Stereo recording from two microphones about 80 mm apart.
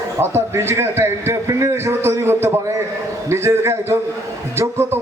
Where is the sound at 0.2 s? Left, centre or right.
Right.